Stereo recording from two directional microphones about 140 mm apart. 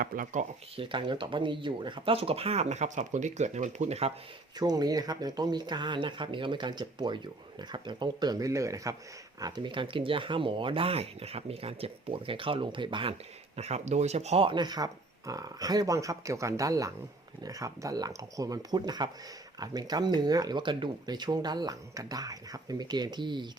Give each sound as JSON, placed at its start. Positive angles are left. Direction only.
{"t": 0.0, "sound": "speech", "side_deg": -75}
{"t": 0.8, "sound": "speech", "side_deg": -35}
{"t": 4.5, "sound": "speech", "side_deg": -30}
{"t": 13.6, "sound": "speech", "side_deg": -50}